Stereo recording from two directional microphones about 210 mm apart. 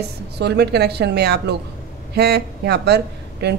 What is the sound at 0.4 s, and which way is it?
A woman's voice, 50° right (ahead or behind).